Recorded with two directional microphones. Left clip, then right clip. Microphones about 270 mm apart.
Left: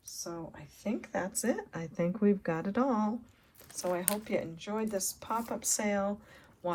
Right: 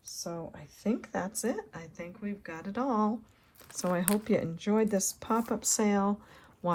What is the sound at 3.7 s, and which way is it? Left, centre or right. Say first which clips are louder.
Speech: right 2 dB; right.